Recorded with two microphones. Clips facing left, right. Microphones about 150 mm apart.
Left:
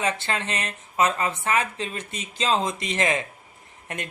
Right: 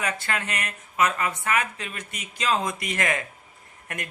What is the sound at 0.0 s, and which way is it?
Speech, 25° left (ahead or behind).